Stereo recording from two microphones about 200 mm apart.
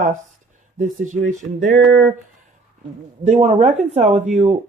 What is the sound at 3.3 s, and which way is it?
Speech, 30° right (ahead or behind).